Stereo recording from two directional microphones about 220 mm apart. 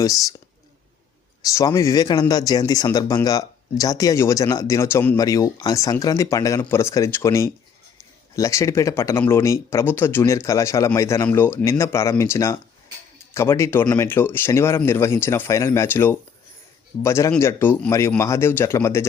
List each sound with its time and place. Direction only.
0.0 s speech: 15° left (ahead or behind)
1.5 s speech: 15° left (ahead or behind)